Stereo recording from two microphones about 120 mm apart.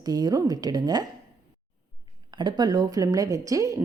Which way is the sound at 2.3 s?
40° right (ahead or behind).